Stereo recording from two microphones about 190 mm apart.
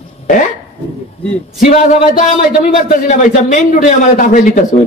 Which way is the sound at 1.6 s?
45° left (ahead or behind).